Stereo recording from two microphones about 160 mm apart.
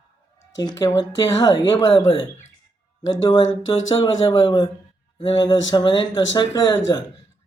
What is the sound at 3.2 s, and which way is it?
Speech, 30° left (ahead or behind).